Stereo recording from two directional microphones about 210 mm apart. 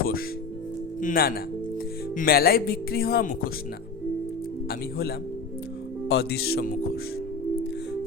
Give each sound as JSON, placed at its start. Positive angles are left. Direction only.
{"t": 1.0, "sound": "speech", "side_deg": 45}
{"t": 4.7, "sound": "speech", "side_deg": 50}